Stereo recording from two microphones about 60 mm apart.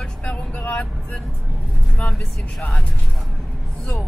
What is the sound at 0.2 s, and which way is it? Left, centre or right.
Vehicle, left.